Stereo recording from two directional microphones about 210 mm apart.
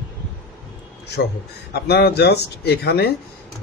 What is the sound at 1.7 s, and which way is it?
Speech, 50° left (ahead or behind).